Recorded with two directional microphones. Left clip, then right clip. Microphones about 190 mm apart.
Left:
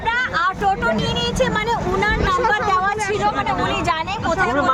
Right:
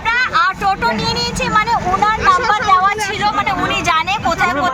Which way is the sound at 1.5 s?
30° right (ahead or behind).